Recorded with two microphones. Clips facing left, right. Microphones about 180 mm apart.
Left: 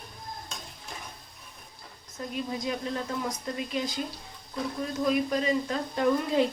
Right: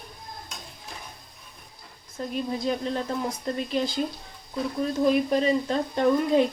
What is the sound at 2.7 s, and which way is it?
A woman's voice, 30° right (ahead or behind).